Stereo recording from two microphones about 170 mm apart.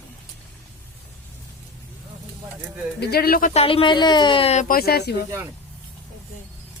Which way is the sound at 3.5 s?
35° left (ahead or behind).